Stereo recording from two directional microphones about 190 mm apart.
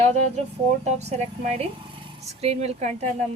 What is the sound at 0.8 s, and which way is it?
A woman's voice, 35° right (ahead or behind).